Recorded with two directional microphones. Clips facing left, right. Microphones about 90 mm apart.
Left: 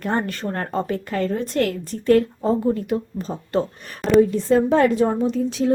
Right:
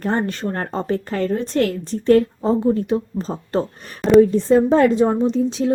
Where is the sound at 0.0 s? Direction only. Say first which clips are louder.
Right 2 dB; 30° right (ahead or behind).